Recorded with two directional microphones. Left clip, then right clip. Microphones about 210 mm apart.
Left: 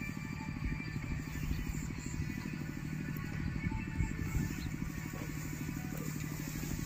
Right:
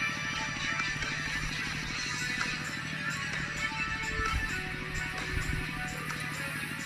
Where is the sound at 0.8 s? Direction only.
55° right (ahead or behind).